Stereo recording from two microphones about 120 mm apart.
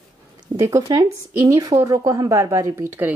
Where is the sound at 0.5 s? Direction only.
25° right (ahead or behind).